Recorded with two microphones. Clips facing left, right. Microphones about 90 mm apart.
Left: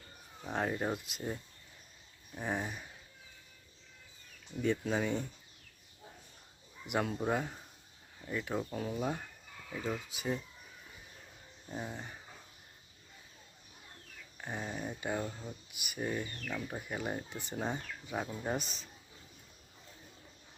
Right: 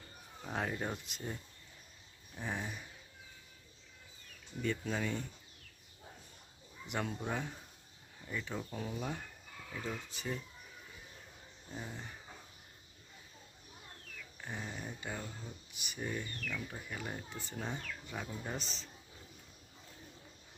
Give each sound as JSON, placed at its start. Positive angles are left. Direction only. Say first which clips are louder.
{"t": 0.4, "sound": "speech", "louder": "left 4 dB", "side_deg": 5}
{"t": 4.6, "sound": "speech", "louder": "left 4 dB", "side_deg": 15}
{"t": 6.8, "sound": "speech", "louder": "left 5 dB", "side_deg": 10}
{"t": 8.7, "sound": "speech", "louder": "left 4 dB", "side_deg": 0}
{"t": 9.0, "sound": "speech", "louder": "left 5 dB", "side_deg": 15}
{"t": 11.7, "sound": "speech", "louder": "left 4 dB", "side_deg": 20}
{"t": 14.3, "sound": "speech", "louder": "left 4 dB", "side_deg": 15}
{"t": 16.7, "sound": "speech", "louder": "left 5 dB", "side_deg": 25}